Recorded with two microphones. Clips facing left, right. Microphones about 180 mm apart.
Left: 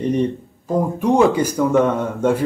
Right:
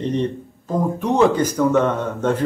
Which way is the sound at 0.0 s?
10° left (ahead or behind).